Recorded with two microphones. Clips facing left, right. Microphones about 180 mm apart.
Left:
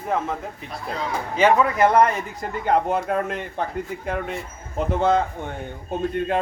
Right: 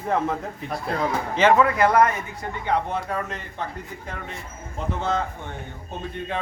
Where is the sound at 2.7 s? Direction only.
45° left (ahead or behind).